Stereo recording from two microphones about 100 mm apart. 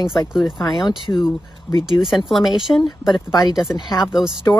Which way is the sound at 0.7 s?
50° left (ahead or behind).